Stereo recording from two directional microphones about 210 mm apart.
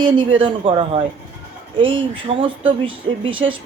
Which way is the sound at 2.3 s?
25° right (ahead or behind).